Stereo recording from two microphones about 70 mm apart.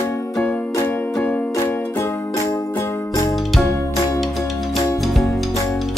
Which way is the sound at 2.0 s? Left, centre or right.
Left.